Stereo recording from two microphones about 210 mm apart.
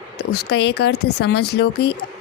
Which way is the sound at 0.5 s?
50° left (ahead or behind).